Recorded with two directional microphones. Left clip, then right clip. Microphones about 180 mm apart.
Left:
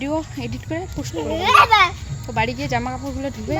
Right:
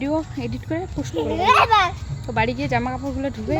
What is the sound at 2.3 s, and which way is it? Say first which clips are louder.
Speech: even; 5° right (ahead or behind).